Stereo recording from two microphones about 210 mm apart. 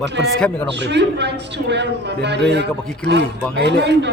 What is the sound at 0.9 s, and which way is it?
A man's voice, 55° right (ahead or behind).